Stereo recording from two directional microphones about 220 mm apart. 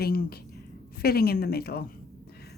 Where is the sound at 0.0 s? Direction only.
45° left (ahead or behind).